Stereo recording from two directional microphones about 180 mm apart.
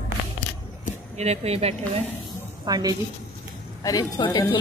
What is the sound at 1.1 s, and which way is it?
Speech, 35° right (ahead or behind).